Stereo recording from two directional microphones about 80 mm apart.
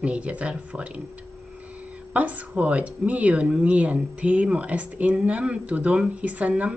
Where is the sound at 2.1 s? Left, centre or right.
Centre.